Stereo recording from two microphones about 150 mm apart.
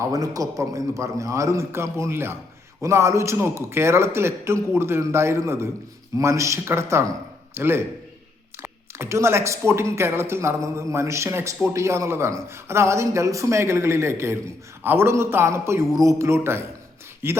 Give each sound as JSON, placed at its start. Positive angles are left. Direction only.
{"t": 0.0, "sound": "a man's voice", "side_deg": -25}